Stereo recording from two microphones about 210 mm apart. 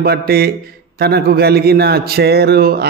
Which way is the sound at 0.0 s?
45° right (ahead or behind).